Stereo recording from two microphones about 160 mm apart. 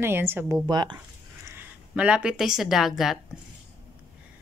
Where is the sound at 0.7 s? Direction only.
25° right (ahead or behind).